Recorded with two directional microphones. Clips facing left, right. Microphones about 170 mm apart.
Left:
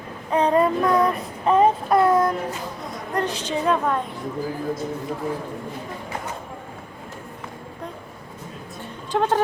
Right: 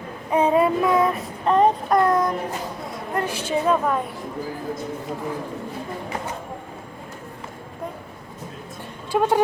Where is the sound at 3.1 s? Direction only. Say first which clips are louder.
Right 1 dB; 10° right (ahead or behind).